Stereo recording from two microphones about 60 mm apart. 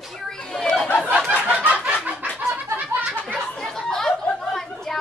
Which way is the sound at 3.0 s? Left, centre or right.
Right.